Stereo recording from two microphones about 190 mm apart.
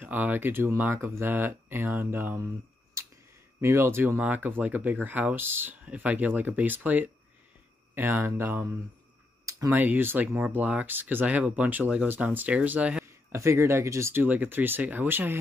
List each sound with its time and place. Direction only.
0.0 s speech: 10° right (ahead or behind)
3.0 s clicking: 15° right (ahead or behind)
3.6 s speech: 15° right (ahead or behind)